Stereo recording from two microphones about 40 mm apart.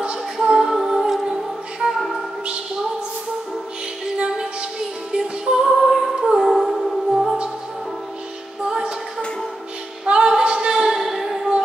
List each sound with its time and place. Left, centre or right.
0.4 s music: centre
5.1 s music: right
5.9 s a capella: centre
6.6 s music: centre
10.0 s female singing: right